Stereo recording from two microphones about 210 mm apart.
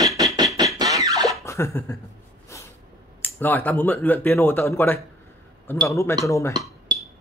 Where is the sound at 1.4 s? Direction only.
15° left (ahead or behind).